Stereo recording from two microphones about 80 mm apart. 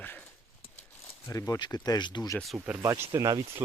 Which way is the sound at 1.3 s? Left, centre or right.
Left.